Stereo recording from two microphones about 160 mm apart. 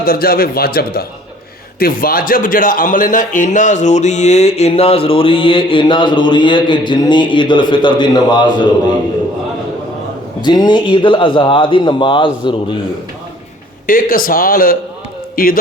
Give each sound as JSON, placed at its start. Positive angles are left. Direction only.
{"t": 0.0, "sound": "a man's voice", "side_deg": 70}
{"t": 1.8, "sound": "a man's voice", "side_deg": 65}
{"t": 10.4, "sound": "a man's voice", "side_deg": 25}
{"t": 13.8, "sound": "speech", "side_deg": 60}